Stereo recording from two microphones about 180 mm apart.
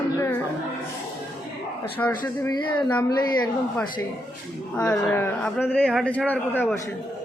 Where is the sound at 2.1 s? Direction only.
20° left (ahead or behind).